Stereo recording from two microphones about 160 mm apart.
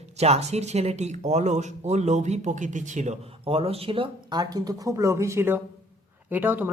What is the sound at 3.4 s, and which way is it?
Speech, 35° right (ahead or behind).